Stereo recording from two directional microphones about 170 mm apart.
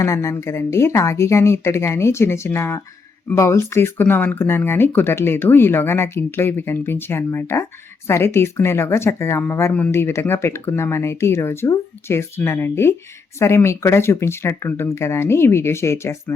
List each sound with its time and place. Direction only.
0.0 s speech: 20° left (ahead or behind)